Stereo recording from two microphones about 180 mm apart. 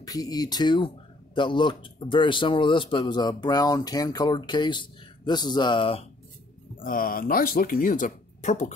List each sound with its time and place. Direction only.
0.0 s speech: 20° left (ahead or behind)
6.8 s speech: 50° left (ahead or behind)